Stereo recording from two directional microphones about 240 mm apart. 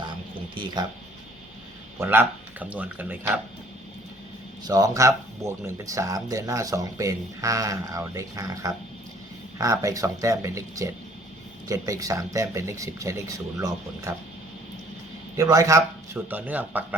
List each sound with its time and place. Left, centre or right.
0.5 s speech: centre
2.0 s speech: centre
4.6 s speech: centre
15.4 s speech: centre